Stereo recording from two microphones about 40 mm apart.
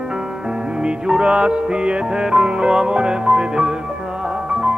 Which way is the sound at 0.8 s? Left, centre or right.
Right.